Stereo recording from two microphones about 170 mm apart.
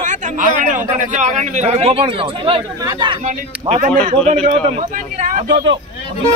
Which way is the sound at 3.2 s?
45° right (ahead or behind).